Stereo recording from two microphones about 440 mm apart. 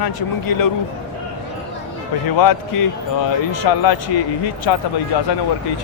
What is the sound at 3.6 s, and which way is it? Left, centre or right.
Speech, left.